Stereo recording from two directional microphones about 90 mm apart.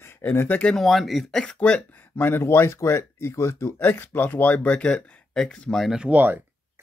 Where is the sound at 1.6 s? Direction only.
20° left (ahead or behind); by 6.0 s 5° left (ahead or behind).